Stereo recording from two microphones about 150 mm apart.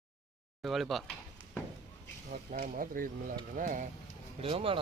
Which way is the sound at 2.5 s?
65° right (ahead or behind).